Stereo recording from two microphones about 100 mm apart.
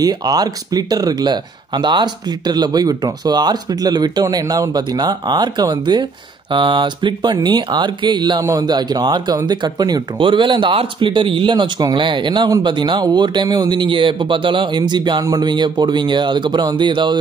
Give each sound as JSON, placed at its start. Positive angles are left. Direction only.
{"t": 0.0, "sound": "speech", "side_deg": -40}
{"t": 10.1, "sound": "speech", "side_deg": -55}